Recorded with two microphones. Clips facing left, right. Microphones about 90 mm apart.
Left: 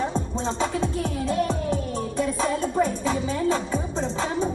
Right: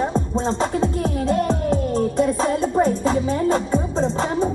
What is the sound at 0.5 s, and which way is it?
Music, 40° right (ahead or behind).